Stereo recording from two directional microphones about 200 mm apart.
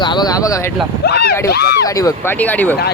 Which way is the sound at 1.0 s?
55° left (ahead or behind).